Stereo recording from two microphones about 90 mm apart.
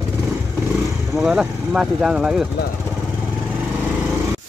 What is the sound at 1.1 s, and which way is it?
Speech, 5° right (ahead or behind).